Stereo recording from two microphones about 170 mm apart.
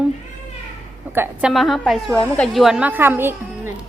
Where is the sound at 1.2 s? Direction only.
5° right (ahead or behind).